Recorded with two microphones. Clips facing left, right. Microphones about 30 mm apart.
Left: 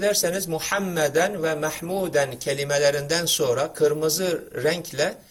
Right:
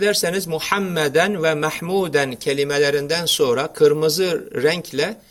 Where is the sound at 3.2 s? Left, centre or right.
Right.